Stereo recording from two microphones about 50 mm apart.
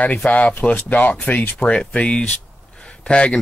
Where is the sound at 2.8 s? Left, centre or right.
Centre.